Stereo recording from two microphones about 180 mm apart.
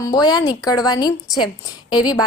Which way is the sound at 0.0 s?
20° left (ahead or behind).